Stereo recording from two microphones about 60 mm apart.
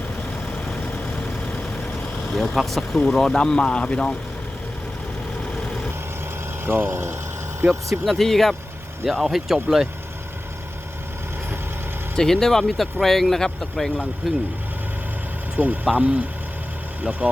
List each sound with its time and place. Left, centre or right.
2.3 s speech: centre
6.7 s speech: right
8.0 s speech: centre
12.1 s speech: centre
15.5 s speech: right